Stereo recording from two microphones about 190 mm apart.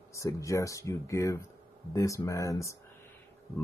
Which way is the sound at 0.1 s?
15° left (ahead or behind).